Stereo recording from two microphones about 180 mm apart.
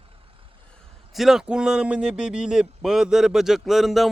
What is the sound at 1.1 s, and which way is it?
A man's voice, centre (ahead or behind).